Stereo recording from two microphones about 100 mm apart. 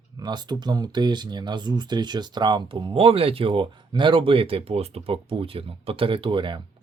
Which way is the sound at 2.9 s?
70° right (ahead or behind).